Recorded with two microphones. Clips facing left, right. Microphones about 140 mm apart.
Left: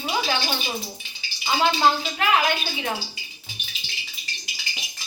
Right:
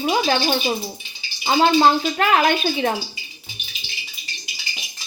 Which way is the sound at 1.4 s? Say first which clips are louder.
Right 5 dB; 45° right (ahead or behind).